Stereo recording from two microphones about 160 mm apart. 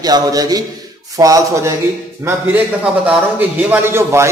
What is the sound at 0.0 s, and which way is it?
A man's voice, 25° right (ahead or behind).